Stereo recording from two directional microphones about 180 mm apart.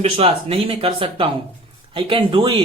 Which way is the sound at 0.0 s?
35° right (ahead or behind).